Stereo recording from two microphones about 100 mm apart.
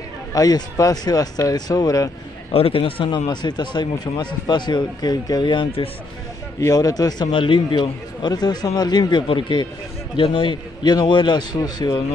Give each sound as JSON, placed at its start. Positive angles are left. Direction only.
{"t": 0.3, "sound": "speech", "side_deg": 40}
{"t": 2.5, "sound": "speech", "side_deg": 70}
{"t": 3.3, "sound": "speech", "side_deg": 50}
{"t": 6.6, "sound": "speech", "side_deg": 40}
{"t": 7.2, "sound": "speech", "side_deg": 60}